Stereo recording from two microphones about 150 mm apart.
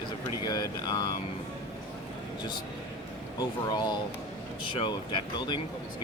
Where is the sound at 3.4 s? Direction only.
30° left (ahead or behind).